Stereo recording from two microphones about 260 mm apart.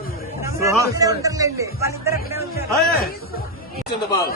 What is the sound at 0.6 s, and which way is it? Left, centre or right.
A man's voice, centre.